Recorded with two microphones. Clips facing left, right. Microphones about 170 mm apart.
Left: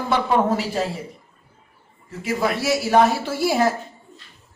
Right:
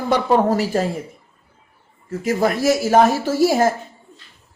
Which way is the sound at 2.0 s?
45° right (ahead or behind).